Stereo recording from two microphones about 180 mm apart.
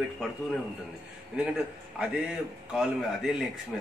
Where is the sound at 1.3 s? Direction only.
5° right (ahead or behind).